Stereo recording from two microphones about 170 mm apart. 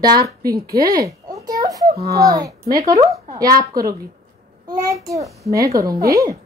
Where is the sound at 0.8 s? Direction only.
20° right (ahead or behind).